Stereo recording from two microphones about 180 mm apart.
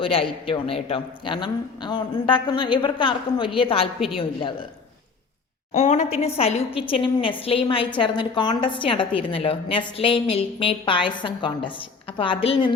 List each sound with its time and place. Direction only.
0.0 s a man's voice: 30° left (ahead or behind)
5.7 s a woman's voice: 40° left (ahead or behind)